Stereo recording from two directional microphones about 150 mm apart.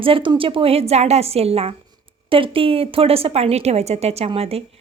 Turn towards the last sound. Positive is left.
turn(degrees=-40)  # may be behind; listen again after turning